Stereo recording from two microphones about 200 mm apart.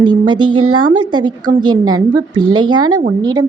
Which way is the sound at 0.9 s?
20° right (ahead or behind).